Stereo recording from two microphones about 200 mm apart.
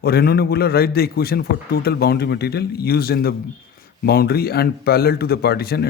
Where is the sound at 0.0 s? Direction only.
50° left (ahead or behind).